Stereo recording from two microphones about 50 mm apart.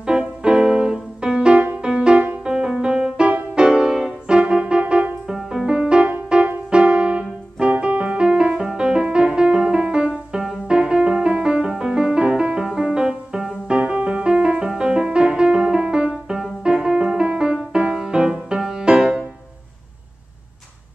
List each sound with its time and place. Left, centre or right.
0.0 s music: centre